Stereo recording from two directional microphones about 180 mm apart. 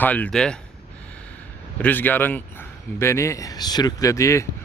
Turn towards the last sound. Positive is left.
turn(degrees=15)  # may be behind; listen again after turning